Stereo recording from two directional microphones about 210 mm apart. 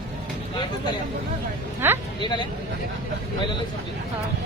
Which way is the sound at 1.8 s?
10° right (ahead or behind).